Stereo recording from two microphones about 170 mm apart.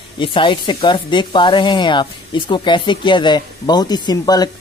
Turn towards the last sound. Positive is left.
turn(degrees=25)  # may be behind; listen again after turning